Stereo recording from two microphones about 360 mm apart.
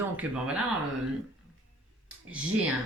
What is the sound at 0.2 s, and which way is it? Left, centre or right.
Speech, centre.